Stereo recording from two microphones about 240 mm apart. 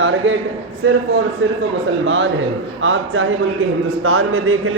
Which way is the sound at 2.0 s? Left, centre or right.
Right.